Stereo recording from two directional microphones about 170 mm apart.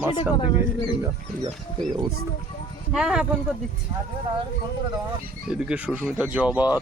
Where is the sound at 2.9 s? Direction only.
5° right (ahead or behind).